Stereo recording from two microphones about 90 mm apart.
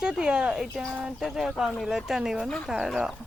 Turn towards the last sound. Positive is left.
turn(degrees=-5)  # may be behind; listen again after turning